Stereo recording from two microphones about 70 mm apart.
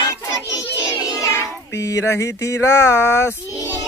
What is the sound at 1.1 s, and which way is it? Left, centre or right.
Child singing, left.